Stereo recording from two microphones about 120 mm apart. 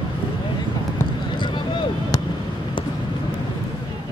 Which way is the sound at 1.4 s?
40° left (ahead or behind).